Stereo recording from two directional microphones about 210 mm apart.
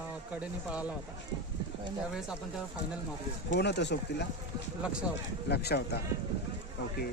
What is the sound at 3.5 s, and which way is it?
Speech, 55° left (ahead or behind).